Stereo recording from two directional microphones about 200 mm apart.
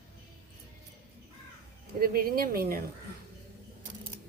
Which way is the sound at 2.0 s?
45° right (ahead or behind).